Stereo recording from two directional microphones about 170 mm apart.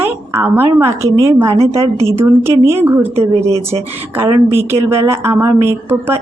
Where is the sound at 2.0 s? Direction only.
15° right (ahead or behind).